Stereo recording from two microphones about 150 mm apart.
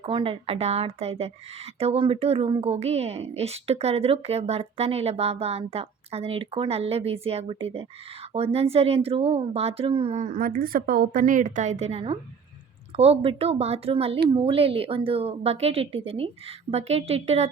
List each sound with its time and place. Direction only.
0.0 s a woman's voice: 35° right (ahead or behind)
10.2 s a woman's voice: 65° right (ahead or behind); by 17.5 s 45° right (ahead or behind)